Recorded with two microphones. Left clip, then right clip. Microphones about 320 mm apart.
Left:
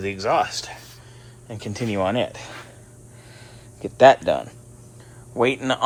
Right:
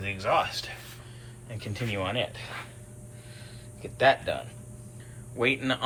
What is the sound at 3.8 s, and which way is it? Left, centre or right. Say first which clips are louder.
Speech: left 10 dB; left.